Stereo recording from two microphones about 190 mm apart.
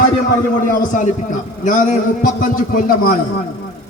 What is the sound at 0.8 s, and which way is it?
A man's voice, 45° left (ahead or behind).